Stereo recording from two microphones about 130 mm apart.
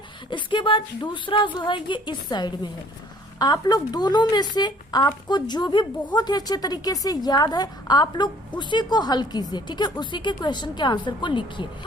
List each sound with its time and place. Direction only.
0.3 s a woman's voice: 40° left (ahead or behind)